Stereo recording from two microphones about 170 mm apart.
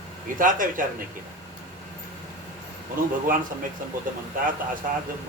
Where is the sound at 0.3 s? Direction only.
50° right (ahead or behind).